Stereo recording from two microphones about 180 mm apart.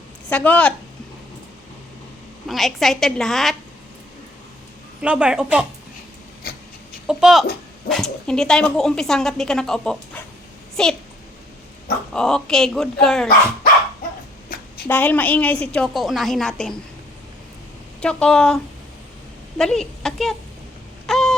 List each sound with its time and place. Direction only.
0.3 s a woman's voice: 10° left (ahead or behind)
2.5 s a woman's voice: centre (ahead or behind)
5.0 s a woman's voice: 5° right (ahead or behind)
6.5 s a sound: 55° left (ahead or behind)
7.1 s a woman's voice: 5° right (ahead or behind)
12.1 s a woman's voice: 5° left (ahead or behind)
14.8 s a woman's voice: 10° left (ahead or behind)
18.0 s a woman's voice: 5° left (ahead or behind)
21.1 s wail: 5° left (ahead or behind)